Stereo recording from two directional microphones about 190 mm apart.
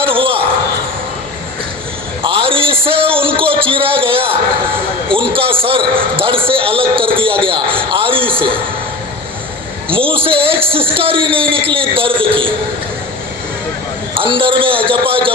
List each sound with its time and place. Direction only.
0.0 s basketball bounce: 30° right (ahead or behind)
2.2 s a sound: 30° right (ahead or behind)
5.1 s speech: 30° right (ahead or behind)
7.9 s a sound: 30° right (ahead or behind)
9.9 s a man's voice: 30° right (ahead or behind)
14.2 s speech: 25° right (ahead or behind)